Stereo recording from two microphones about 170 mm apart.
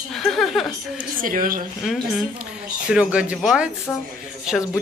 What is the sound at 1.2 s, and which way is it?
Speech, 55° right (ahead or behind).